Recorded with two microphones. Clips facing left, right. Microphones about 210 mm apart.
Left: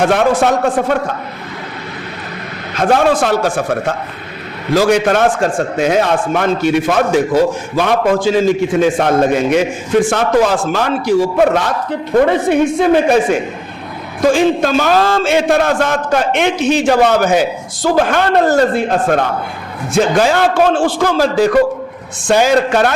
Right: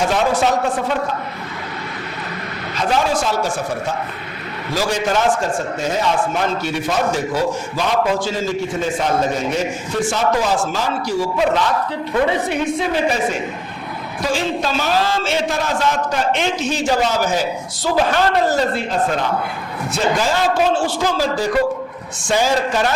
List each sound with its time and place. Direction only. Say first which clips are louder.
0.0 s a man's voice: left 5 dB; 60° left (ahead or behind)
2.7 s a man's voice: left 7 dB; 55° left (ahead or behind)
5.7 s a man's voice: left 6 dB; 75° left (ahead or behind); by 8.4 s 55° left (ahead or behind)
8.8 s a man's voice: left 6 dB; 65° left (ahead or behind); by 9.6 s 85° left
10.0 s a man's voice: left 5 dB; 55° left (ahead or behind)
14.2 s a man's voice: left 9 dB; 50° left (ahead or behind)
17.8 s a man's voice: left 4 dB; 50° left (ahead or behind)
19.9 s a man's voice: left 7 dB; 65° left (ahead or behind)